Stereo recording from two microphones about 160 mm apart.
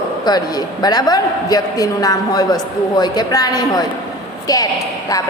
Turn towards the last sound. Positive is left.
turn(degrees=20)  # may be behind; listen again after turning